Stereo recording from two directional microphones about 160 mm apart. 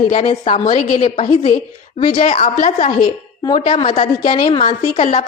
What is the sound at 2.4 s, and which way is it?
Speech, 55° left (ahead or behind).